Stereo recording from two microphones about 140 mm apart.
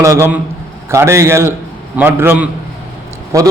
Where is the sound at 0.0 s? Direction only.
20° right (ahead or behind).